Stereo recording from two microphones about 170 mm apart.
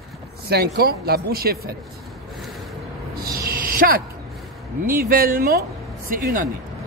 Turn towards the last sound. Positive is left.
turn(degrees=-55)  # may be behind; listen again after turning